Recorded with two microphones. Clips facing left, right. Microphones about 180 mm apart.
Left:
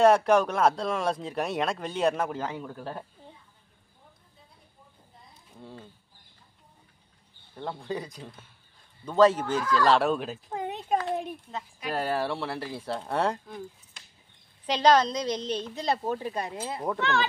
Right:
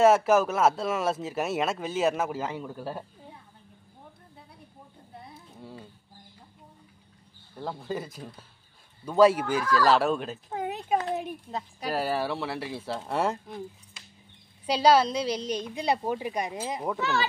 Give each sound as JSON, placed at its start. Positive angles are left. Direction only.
{"t": 0.0, "sound": "speech", "side_deg": -5}
{"t": 5.1, "sound": "a sound", "side_deg": -70}
{"t": 5.6, "sound": "bird", "side_deg": -5}
{"t": 7.5, "sound": "speech", "side_deg": -5}
{"t": 11.1, "sound": "a sound", "side_deg": 0}
{"t": 11.9, "sound": "speech", "side_deg": -5}
{"t": 14.7, "sound": "a woman's voice", "side_deg": -10}
{"t": 16.8, "sound": "speech", "side_deg": -5}